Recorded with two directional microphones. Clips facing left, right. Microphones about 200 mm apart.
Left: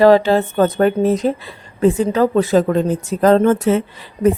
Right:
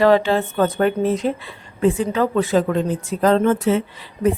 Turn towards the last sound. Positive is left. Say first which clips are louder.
# left 4 dB
turn(degrees=45)  # may be behind; listen again after turning